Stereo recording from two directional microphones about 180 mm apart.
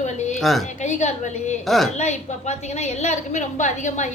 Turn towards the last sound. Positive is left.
turn(degrees=40)  # may be behind; listen again after turning